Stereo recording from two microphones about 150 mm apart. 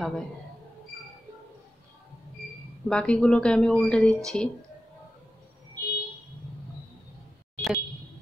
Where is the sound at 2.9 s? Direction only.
5° left (ahead or behind).